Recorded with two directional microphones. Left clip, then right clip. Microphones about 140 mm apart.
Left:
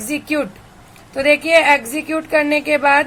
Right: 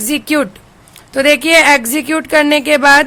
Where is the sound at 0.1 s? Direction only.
75° right (ahead or behind).